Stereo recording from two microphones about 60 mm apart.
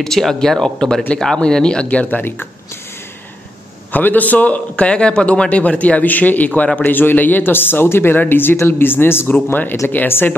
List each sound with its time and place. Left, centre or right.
0.0 s speech: centre; by 2.4 s left
3.9 s a man's voice: left
6.8 s speech: left